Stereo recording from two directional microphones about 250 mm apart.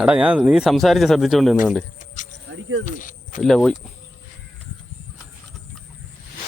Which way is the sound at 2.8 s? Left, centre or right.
Left.